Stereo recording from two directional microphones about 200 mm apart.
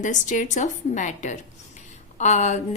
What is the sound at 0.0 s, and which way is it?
A woman's voice, 40° left (ahead or behind).